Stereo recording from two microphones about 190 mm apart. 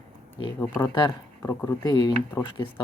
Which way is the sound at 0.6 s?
10° left (ahead or behind).